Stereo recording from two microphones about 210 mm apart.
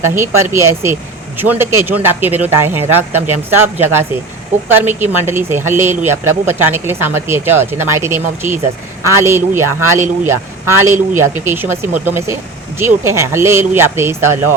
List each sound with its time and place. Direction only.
0.0 s speech: 10° right (ahead or behind)
3.2 s speech: 35° right (ahead or behind)
3.5 s speech: 10° right (ahead or behind)